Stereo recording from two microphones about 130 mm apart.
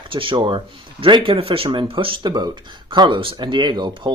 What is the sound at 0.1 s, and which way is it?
Speech, 40° right (ahead or behind).